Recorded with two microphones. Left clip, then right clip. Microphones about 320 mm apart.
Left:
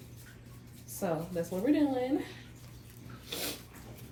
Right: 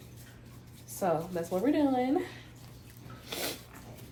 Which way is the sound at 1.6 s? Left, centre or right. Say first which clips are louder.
Right 1 dB; right.